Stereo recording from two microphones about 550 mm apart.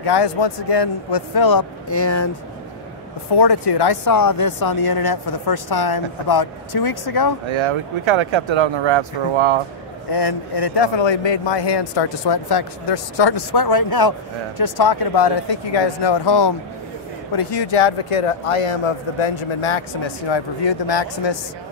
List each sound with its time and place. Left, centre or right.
0.0 s speech: left
3.3 s speech: left
7.5 s speech: right
10.1 s a man's voice: left
20.2 s a man's voice: left